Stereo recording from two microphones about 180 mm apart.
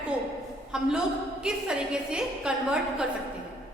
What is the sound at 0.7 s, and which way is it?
A woman's voice, 5° right (ahead or behind).